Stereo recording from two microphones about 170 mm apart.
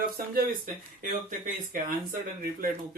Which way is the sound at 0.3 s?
45° right (ahead or behind).